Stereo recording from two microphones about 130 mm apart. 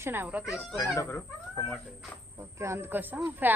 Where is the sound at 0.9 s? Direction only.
20° left (ahead or behind).